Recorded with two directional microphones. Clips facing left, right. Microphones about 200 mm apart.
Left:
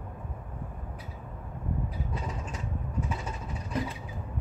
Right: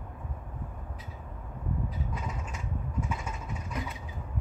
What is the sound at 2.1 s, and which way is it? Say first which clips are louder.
Mechanisms: left 2 dB; 30° left (ahead or behind).